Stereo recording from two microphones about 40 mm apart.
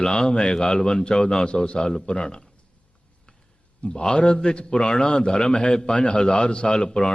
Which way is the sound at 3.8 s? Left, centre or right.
Left.